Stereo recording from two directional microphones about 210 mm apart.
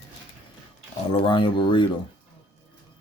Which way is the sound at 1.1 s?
25° left (ahead or behind).